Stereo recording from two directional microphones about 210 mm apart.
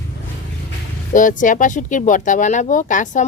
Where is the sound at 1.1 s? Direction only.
40° left (ahead or behind).